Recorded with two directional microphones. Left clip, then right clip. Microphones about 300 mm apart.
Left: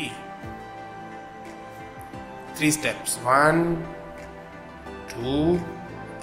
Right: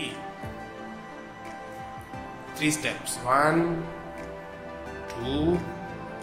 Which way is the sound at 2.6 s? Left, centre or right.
Centre.